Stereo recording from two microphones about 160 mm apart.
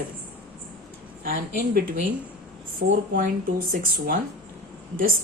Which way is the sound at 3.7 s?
65° right (ahead or behind).